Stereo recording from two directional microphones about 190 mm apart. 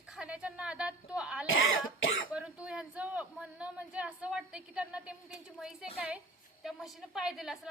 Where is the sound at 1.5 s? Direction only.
90° left.